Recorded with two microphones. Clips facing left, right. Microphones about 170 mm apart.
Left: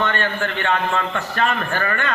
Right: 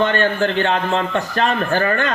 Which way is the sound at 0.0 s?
35° right (ahead or behind).